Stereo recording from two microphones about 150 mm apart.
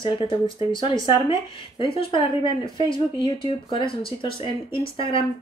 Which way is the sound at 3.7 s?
35° left (ahead or behind).